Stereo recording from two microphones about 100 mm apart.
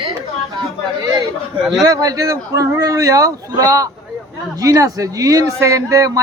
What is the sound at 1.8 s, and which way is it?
A man's voice, 35° right (ahead or behind).